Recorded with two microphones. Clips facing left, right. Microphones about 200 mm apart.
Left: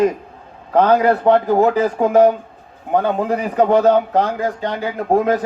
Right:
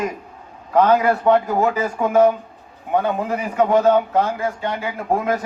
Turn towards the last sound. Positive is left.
turn(degrees=35)  # may be behind; listen again after turning